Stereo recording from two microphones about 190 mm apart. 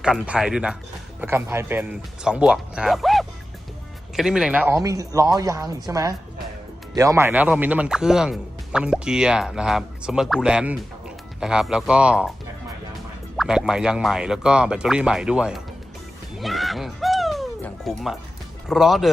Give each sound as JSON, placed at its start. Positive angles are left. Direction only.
{"t": 0.0, "sound": "speech", "side_deg": -5}
{"t": 13.3, "sound": "speech", "side_deg": 0}
{"t": 16.4, "sound": "music", "side_deg": 0}
{"t": 18.7, "sound": "speech", "side_deg": 0}